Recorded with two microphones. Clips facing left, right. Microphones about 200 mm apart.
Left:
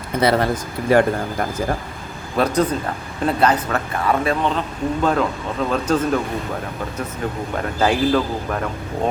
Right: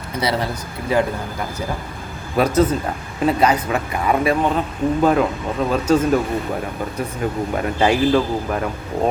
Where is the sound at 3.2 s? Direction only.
5° right (ahead or behind).